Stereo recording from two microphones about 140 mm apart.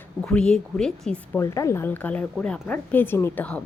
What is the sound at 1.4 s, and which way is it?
Speech, 20° left (ahead or behind).